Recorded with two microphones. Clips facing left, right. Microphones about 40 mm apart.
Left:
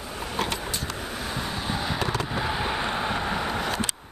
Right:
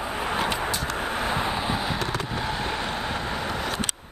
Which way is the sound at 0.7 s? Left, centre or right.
Right.